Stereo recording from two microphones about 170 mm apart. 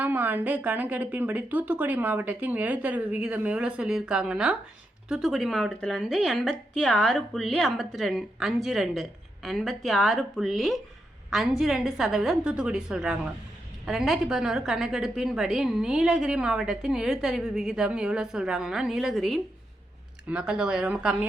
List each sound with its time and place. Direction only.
0.0 s a woman's voice: 10° right (ahead or behind)